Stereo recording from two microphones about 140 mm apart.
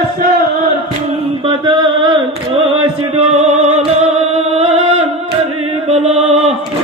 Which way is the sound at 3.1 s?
45° right (ahead or behind).